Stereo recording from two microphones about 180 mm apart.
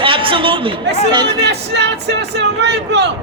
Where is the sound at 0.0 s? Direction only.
30° right (ahead or behind).